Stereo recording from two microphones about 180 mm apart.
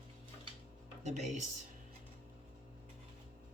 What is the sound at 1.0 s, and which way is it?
Speech, 40° right (ahead or behind).